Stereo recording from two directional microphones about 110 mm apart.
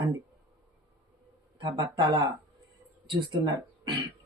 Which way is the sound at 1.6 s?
45° right (ahead or behind).